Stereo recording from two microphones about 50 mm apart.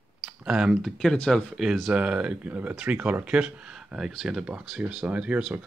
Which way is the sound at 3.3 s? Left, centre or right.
Centre.